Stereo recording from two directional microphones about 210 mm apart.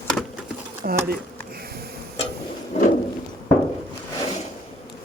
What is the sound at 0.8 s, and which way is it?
Speech, 40° right (ahead or behind).